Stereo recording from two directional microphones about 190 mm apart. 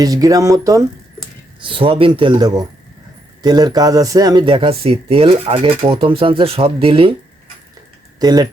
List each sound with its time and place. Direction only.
0.0 s speech: 20° right (ahead or behind)
1.6 s speech: 30° right (ahead or behind)
8.2 s speech: 20° right (ahead or behind)